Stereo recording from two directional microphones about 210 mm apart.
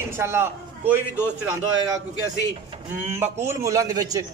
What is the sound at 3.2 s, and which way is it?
A man's voice, 10° right (ahead or behind).